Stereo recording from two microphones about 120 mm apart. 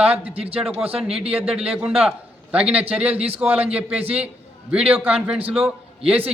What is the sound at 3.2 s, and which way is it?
Speech, 55° right (ahead or behind).